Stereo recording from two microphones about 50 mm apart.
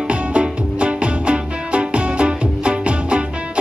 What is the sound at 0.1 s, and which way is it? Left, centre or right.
Music, right.